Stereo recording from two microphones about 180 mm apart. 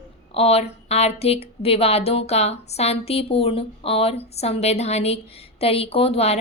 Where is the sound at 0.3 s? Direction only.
35° left (ahead or behind).